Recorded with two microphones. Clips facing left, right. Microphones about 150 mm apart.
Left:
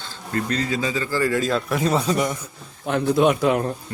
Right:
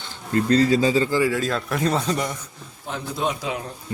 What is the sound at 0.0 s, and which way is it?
A man's voice, 30° right (ahead or behind).